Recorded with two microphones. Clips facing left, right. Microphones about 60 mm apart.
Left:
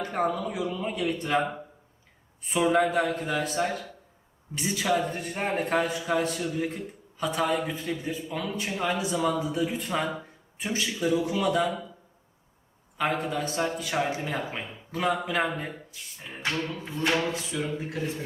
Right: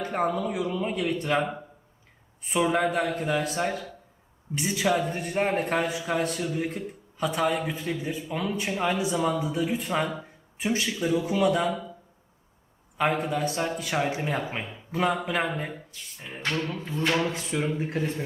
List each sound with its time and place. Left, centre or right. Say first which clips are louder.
0.1 s a man's voice: right 2 dB; centre
13.0 s a man's voice: right 2 dB; centre
13.5 s speech: even; centre
17.3 s speech: right 3 dB; right